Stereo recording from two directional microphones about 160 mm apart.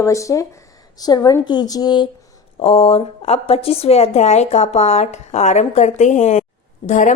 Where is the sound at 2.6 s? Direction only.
35° left (ahead or behind).